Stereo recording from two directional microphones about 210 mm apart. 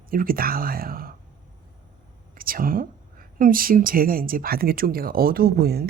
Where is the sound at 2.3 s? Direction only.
45° right (ahead or behind).